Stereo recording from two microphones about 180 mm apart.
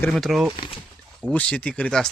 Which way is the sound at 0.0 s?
5° left (ahead or behind).